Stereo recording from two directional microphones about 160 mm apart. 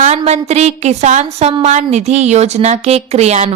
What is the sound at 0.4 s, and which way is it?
A woman's voice, 45° right (ahead or behind).